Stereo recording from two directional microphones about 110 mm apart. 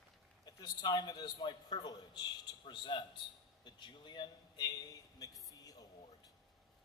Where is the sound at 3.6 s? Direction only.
45° left (ahead or behind).